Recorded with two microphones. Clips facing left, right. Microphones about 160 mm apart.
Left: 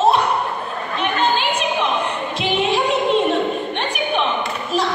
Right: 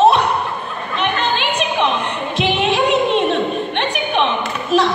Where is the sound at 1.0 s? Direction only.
70° right (ahead or behind).